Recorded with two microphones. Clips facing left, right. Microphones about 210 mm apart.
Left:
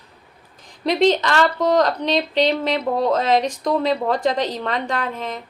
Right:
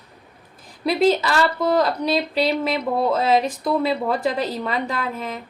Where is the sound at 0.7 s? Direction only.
5° right (ahead or behind).